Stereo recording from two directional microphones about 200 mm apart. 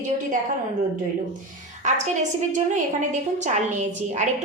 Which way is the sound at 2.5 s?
40° right (ahead or behind).